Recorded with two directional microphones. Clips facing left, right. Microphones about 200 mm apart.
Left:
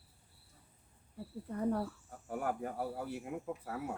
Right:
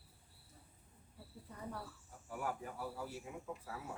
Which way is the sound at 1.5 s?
55° left (ahead or behind).